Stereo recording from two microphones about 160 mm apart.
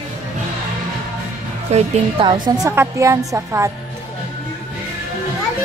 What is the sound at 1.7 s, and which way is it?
Speech, 45° right (ahead or behind).